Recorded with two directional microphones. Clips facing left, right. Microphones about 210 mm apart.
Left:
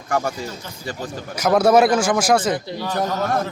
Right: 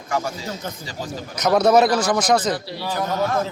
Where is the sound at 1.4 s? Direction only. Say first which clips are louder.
Left 1 dB; 5° left (ahead or behind).